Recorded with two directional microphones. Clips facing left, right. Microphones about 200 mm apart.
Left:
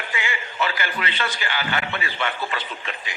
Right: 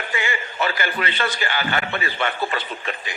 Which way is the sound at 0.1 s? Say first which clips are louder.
Right 3 dB; 45° right (ahead or behind).